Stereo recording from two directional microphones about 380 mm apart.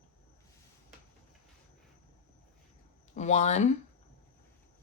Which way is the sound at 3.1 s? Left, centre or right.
Centre.